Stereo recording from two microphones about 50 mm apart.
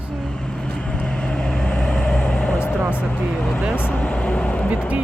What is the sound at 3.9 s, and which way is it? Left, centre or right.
Speech, centre.